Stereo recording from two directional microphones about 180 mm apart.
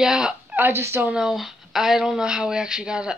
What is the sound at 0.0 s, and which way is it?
Speech, 5° right (ahead or behind).